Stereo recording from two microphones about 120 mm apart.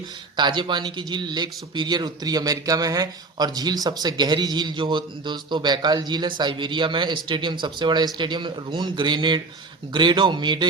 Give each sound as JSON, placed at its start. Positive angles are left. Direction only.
{"t": 0.3, "sound": "a man's voice", "side_deg": -40}